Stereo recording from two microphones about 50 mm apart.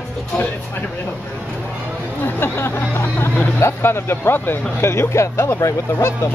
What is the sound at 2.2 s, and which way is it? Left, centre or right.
Vehicle, left.